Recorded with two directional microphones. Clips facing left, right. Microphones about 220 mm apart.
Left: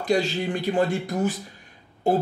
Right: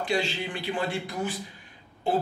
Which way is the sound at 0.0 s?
40° left (ahead or behind).